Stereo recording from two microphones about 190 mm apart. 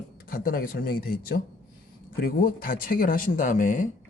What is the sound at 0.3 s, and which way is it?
Speech, 50° left (ahead or behind).